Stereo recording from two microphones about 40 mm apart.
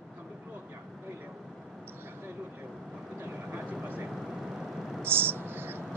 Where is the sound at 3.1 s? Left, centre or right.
Right.